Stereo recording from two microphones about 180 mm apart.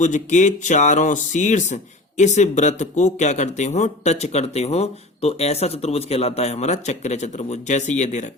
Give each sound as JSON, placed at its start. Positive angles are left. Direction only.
{"t": 0.0, "sound": "speech", "side_deg": 45}